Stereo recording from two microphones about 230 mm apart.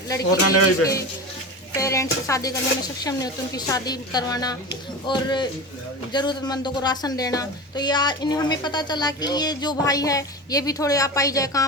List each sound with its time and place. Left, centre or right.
0.3 s speech: left
1.7 s a woman's voice: centre